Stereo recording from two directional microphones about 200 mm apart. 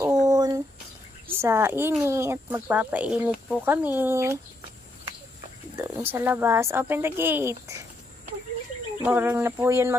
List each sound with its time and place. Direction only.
0.0 s a sound: 15° right (ahead or behind)
1.4 s speech: 10° right (ahead or behind)
5.8 s speech: 10° right (ahead or behind)
9.0 s speech: 10° right (ahead or behind)